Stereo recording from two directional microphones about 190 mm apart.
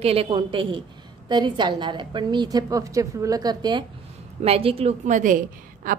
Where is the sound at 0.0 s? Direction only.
30° right (ahead or behind).